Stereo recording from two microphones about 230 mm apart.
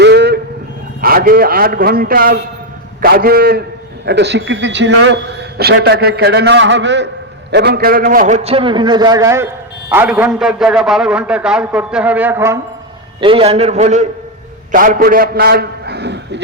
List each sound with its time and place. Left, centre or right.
0.0 s a sound: right
1.0 s a man's voice: right; by 12.5 s centre
13.1 s a man's voice: right